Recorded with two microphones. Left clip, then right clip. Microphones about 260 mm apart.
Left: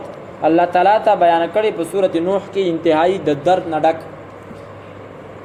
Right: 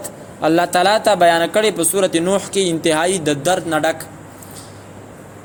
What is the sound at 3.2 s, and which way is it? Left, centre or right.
Speech, right.